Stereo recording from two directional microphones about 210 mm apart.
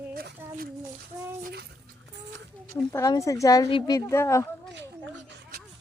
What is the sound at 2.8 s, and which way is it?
Speech, 15° left (ahead or behind).